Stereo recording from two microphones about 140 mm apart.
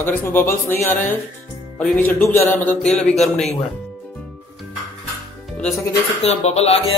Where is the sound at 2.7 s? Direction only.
5° left (ahead or behind).